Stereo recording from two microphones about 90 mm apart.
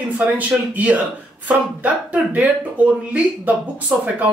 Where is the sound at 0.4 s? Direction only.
15° right (ahead or behind).